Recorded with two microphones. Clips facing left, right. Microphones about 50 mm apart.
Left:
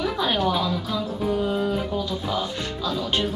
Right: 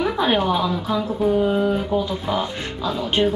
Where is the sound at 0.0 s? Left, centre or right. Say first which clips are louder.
Right 4 dB; right.